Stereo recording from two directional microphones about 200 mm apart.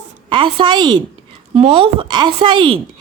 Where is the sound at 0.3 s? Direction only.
25° right (ahead or behind).